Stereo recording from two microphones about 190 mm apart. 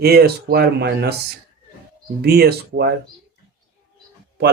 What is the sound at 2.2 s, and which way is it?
Speech, 55° right (ahead or behind).